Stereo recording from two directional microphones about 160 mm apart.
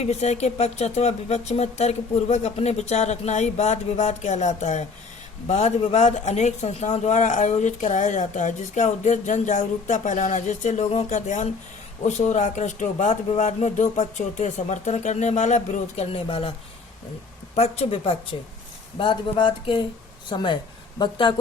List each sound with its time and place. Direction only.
0.0 s speech: 45° left (ahead or behind)